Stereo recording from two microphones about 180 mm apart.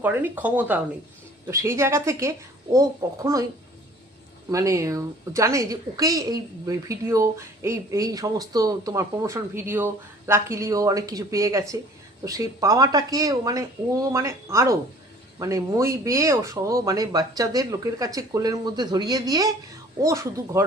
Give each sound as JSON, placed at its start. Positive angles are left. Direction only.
{"t": 0.0, "sound": "a woman's voice", "side_deg": -10}
{"t": 4.4, "sound": "a woman's voice", "side_deg": -20}